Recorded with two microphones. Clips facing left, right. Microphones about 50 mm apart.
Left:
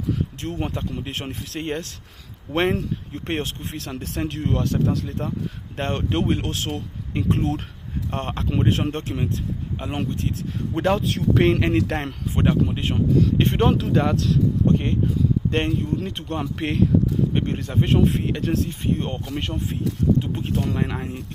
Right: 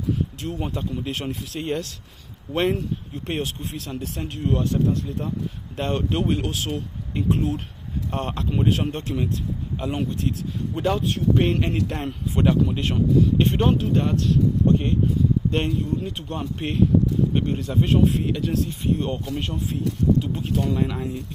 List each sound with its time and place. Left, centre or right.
0.4 s speech: left
1.0 s speech: left
1.3 s speech: left
2.5 s speech: left
5.8 s speech: left
8.1 s speech: left
10.7 s speech: left
12.4 s speech: left
13.4 s speech: left
13.7 s speech: left
14.7 s speech: left
17.3 s speech: left